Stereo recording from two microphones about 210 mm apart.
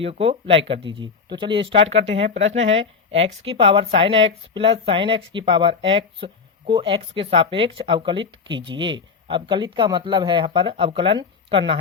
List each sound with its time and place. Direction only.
0.0 s speech: 25° right (ahead or behind)